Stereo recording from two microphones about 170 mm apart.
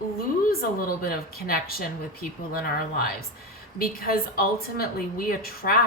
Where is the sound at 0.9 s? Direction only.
60° left (ahead or behind).